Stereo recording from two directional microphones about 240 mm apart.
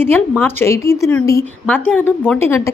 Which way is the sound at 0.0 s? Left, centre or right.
Centre.